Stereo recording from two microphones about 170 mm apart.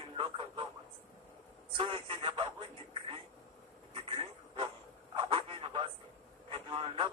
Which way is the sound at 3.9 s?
35° right (ahead or behind).